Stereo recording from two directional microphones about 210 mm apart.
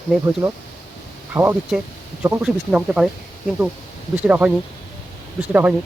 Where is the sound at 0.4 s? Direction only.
20° right (ahead or behind); by 3.1 s 5° right (ahead or behind).